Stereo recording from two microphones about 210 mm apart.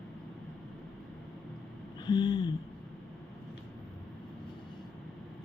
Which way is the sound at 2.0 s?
20° left (ahead or behind).